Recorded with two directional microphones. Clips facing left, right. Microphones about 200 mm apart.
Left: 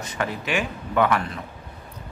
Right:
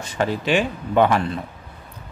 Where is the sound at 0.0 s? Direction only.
30° right (ahead or behind).